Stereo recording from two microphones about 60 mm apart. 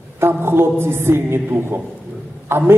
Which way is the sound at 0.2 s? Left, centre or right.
Right.